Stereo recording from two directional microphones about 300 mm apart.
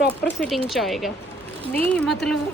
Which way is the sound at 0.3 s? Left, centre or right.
Centre.